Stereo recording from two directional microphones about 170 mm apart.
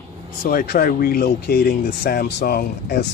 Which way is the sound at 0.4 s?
60° left (ahead or behind).